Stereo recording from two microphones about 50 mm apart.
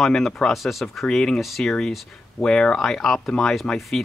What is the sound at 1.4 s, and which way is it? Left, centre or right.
Speech, centre.